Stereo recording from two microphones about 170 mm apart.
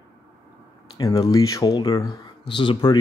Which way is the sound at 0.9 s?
20° left (ahead or behind).